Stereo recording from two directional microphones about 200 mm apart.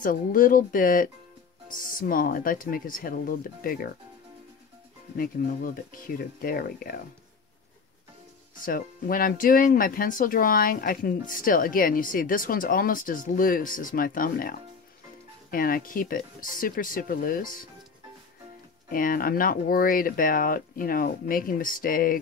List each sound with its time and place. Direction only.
0.0 s speech: 45° left (ahead or behind)
5.1 s speech: 45° left (ahead or behind)
8.5 s speech: 45° left (ahead or behind)
15.5 s speech: 45° left (ahead or behind)
18.9 s speech: 45° left (ahead or behind)